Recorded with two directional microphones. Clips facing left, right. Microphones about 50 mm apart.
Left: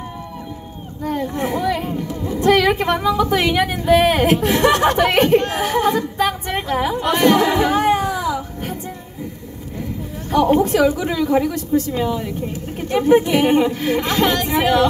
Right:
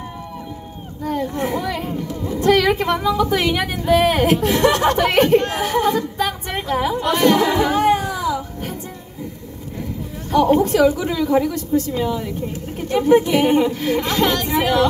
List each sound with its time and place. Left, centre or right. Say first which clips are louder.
1.0 s speech: even; left
10.3 s speech: even; left